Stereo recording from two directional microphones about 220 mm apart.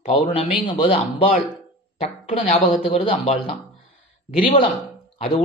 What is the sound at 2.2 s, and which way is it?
A man's voice, 30° left (ahead or behind).